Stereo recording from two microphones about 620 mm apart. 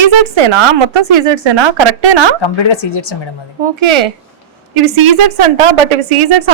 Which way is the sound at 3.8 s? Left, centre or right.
Right.